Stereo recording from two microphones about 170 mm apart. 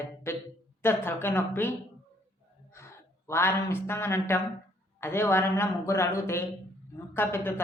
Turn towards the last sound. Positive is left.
turn(degrees=15)  # may be behind; listen again after turning